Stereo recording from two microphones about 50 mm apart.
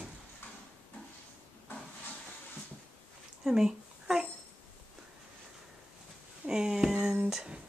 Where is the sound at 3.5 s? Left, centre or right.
Centre.